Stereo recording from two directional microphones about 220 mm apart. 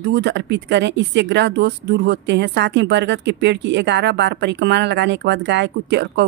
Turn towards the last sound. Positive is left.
turn(degrees=-50)  # may be behind; listen again after turning